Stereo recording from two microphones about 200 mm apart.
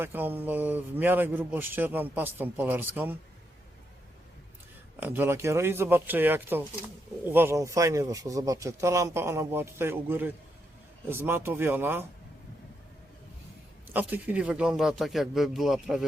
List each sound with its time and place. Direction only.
0.0 s speech: 10° right (ahead or behind)
4.9 s speech: 10° right (ahead or behind)
13.8 s speech: 10° right (ahead or behind)